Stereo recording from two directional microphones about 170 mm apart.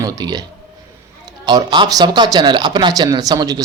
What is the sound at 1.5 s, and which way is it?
Speech, 25° right (ahead or behind).